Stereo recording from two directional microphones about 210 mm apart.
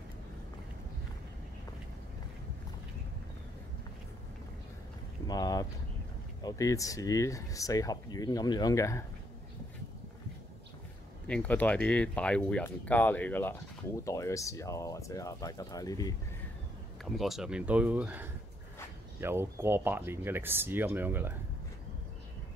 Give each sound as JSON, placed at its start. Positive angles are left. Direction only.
{"t": 5.3, "sound": "speech", "side_deg": 20}
{"t": 11.2, "sound": "speech", "side_deg": 5}
{"t": 17.0, "sound": "speech", "side_deg": 0}